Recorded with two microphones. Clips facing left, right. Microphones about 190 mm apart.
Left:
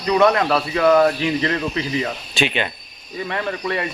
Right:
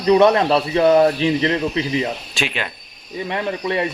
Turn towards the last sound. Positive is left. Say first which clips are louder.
# right 2 dB
turn(degrees=-20)  # may be behind; listen again after turning